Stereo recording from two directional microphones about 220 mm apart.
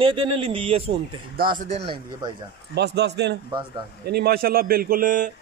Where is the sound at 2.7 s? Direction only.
50° right (ahead or behind).